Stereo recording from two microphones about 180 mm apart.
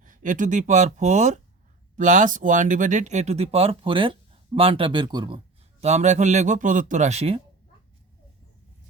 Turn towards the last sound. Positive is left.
turn(degrees=-35)  # may be behind; listen again after turning